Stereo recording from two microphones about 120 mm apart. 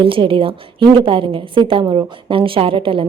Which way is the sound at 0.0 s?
45° right (ahead or behind).